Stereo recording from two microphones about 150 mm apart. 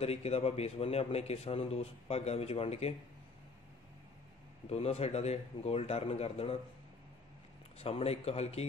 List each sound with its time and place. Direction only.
0.0 s a man's voice: 45° left (ahead or behind)
4.6 s a man's voice: 45° left (ahead or behind)
7.8 s a man's voice: 40° left (ahead or behind)